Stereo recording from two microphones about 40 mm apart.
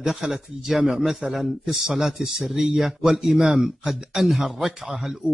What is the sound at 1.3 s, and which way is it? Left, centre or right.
Speech, centre.